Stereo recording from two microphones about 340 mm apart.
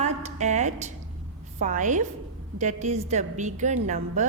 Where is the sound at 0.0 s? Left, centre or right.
Centre.